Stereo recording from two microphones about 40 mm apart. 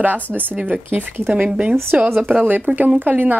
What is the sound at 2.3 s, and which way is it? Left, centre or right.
A woman's voice, right.